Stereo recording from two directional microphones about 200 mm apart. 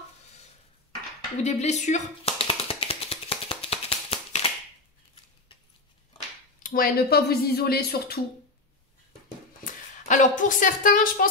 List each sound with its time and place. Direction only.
1.4 s tap: 35° left (ahead or behind)
6.6 s speech: 45° left (ahead or behind)
9.7 s a woman's voice: 40° left (ahead or behind)